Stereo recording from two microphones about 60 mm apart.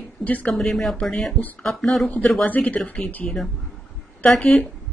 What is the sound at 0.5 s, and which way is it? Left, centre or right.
Speech, centre.